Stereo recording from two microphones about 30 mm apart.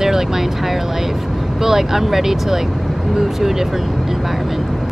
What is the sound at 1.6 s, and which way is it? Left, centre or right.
Speech, centre.